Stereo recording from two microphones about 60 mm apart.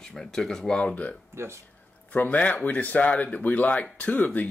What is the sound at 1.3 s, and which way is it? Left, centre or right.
Speech, right.